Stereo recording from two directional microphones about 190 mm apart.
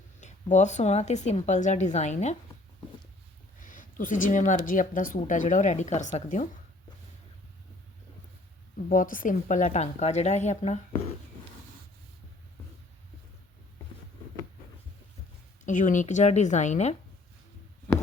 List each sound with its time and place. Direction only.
0.5 s speech: 40° left (ahead or behind)
3.6 s speech: 45° left (ahead or behind)
8.9 s speech: 45° left (ahead or behind)
15.6 s speech: 40° left (ahead or behind)